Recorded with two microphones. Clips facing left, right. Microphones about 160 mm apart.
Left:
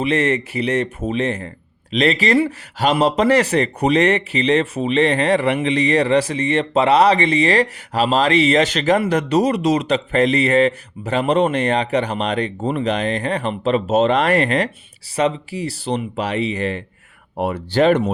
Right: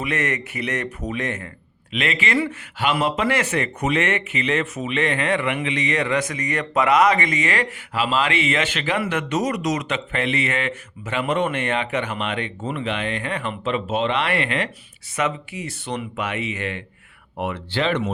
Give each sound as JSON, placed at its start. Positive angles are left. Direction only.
{"t": 0.0, "sound": "speech", "side_deg": 30}